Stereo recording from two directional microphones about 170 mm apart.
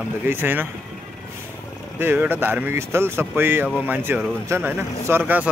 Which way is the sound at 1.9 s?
10° right (ahead or behind).